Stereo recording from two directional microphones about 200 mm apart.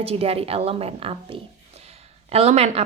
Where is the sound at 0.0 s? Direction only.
30° right (ahead or behind).